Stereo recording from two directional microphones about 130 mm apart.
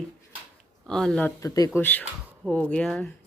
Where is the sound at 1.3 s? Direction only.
25° left (ahead or behind).